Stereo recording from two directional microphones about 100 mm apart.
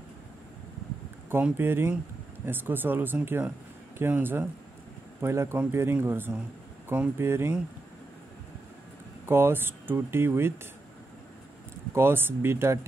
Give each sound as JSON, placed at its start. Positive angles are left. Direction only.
{"t": 1.4, "sound": "speech", "side_deg": -20}
{"t": 9.2, "sound": "speech", "side_deg": -25}
{"t": 11.9, "sound": "speech", "side_deg": -25}